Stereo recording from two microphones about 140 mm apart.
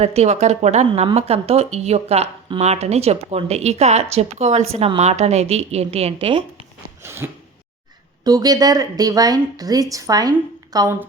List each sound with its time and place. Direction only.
0.0 s speech: 50° right (ahead or behind)
7.0 s throat clearing: 15° right (ahead or behind)
8.2 s speech: 25° right (ahead or behind)